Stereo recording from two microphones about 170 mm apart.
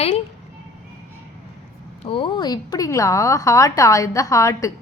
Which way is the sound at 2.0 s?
30° left (ahead or behind).